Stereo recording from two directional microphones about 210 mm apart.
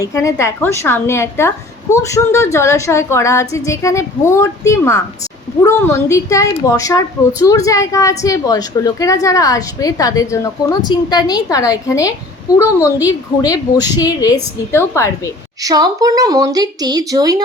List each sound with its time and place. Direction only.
0.0 s a woman's voice: 15° left (ahead or behind)
15.6 s a woman's voice: 15° right (ahead or behind)